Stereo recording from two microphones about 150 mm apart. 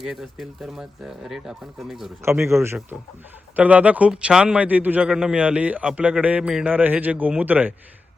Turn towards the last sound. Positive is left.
turn(degrees=-10)  # may be behind; listen again after turning